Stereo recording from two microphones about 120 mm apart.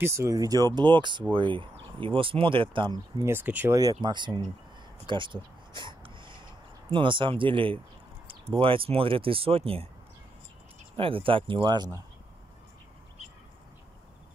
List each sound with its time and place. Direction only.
0.0 s speech: 25° right (ahead or behind); by 3.0 s 45° right (ahead or behind)
3.2 s speech: 20° right (ahead or behind)
4.0 s speech: 40° right (ahead or behind)
5.0 s a sound: 45° right (ahead or behind)
6.9 s speech: 45° right (ahead or behind)
11.0 s speech: 50° right (ahead or behind)